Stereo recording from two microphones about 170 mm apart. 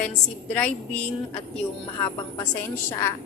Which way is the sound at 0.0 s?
10° left (ahead or behind).